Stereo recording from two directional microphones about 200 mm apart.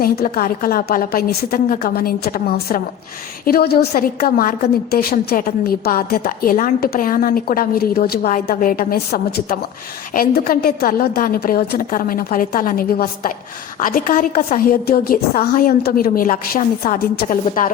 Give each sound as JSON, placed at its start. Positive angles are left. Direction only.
{"t": 0.0, "sound": "a woman's voice", "side_deg": 50}